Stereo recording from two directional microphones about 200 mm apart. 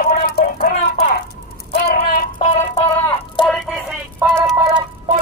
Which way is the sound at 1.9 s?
50° left (ahead or behind).